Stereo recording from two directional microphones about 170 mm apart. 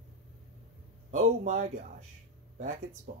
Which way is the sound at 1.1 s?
45° right (ahead or behind).